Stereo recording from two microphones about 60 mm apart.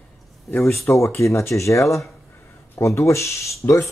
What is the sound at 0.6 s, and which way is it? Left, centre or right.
Speech, left.